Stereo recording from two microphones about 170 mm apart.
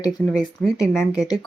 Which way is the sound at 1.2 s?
20° left (ahead or behind).